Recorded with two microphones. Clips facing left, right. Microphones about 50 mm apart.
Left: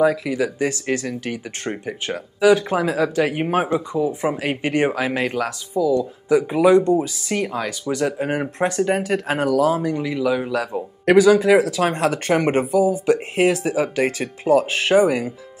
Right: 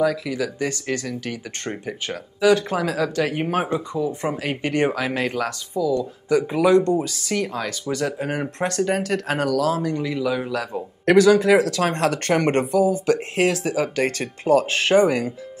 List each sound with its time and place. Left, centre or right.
0.0 s speech: left
1.6 s a man's voice: centre